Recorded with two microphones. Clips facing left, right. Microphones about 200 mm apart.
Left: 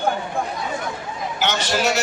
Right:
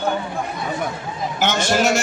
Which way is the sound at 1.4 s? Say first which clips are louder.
Right 3 dB; 50° right (ahead or behind).